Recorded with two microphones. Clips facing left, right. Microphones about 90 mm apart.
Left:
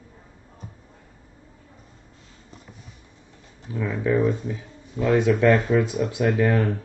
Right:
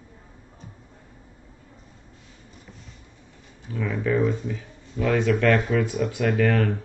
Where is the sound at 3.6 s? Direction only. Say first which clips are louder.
Left 1 dB; 20° left (ahead or behind).